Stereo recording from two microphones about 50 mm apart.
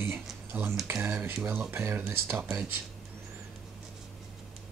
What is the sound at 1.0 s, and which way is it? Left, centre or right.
Speech, right.